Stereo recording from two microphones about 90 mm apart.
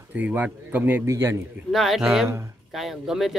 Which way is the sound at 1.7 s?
Centre (ahead or behind).